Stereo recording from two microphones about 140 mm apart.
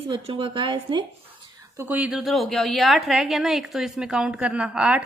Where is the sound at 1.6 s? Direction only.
15° right (ahead or behind).